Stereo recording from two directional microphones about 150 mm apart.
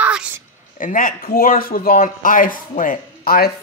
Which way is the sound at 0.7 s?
65° left (ahead or behind).